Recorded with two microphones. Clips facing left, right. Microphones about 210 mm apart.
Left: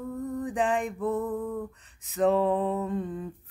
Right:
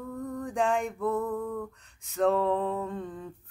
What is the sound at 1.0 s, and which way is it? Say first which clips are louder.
Male singing: left 1 dB; 20° left (ahead or behind).